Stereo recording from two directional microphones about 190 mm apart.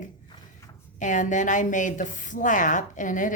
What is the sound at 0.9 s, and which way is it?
A woman's voice, 40° left (ahead or behind).